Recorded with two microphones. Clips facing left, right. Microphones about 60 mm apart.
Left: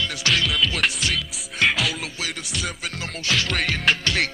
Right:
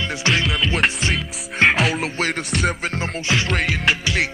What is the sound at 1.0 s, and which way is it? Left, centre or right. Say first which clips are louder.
Music: right 3 dB; right.